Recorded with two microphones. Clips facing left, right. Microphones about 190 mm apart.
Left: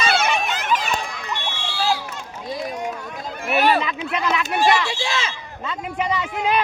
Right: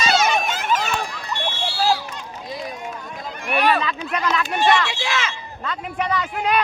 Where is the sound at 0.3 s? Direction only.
45° right (ahead or behind).